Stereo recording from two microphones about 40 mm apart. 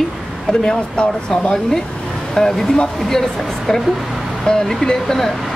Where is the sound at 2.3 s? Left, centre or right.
Centre.